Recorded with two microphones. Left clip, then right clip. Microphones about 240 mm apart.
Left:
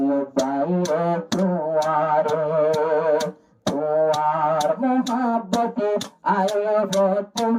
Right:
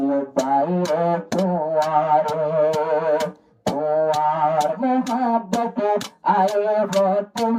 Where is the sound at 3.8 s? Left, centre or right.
Right.